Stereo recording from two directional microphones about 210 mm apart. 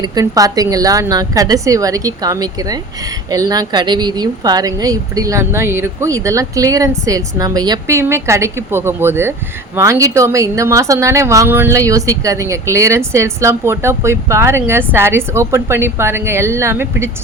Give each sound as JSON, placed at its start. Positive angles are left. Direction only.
{"t": 0.0, "sound": "speech", "side_deg": -20}